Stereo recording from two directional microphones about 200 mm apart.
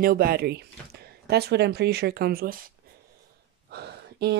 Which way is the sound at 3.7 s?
55° right (ahead or behind).